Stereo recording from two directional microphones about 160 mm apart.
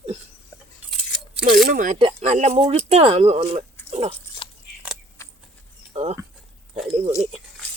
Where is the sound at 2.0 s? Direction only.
40° right (ahead or behind).